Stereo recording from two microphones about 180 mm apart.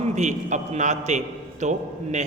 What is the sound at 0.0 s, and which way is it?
A man's voice, 40° right (ahead or behind).